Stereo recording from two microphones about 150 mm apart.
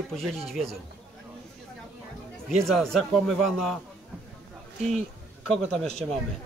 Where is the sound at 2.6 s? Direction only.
Centre (ahead or behind).